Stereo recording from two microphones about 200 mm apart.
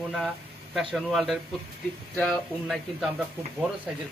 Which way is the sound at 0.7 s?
Centre (ahead or behind).